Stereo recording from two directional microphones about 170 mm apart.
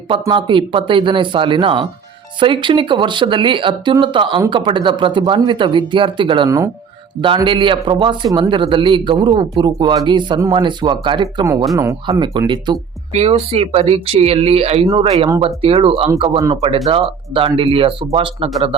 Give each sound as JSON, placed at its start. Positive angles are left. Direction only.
{"t": 0.1, "sound": "a man's voice", "side_deg": -30}